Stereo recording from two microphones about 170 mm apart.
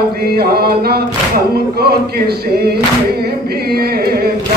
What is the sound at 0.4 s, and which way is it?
Speech, 65° right (ahead or behind).